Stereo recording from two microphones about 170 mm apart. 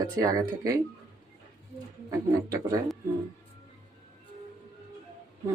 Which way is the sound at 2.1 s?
20° right (ahead or behind).